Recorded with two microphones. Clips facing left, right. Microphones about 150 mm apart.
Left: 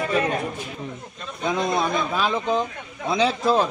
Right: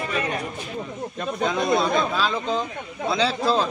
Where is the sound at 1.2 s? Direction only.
55° right (ahead or behind).